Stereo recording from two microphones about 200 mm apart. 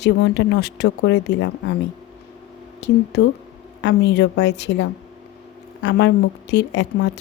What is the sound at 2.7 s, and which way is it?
Speech, 55° left (ahead or behind).